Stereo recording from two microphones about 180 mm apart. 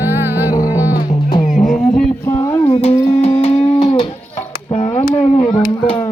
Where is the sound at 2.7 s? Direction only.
35° left (ahead or behind).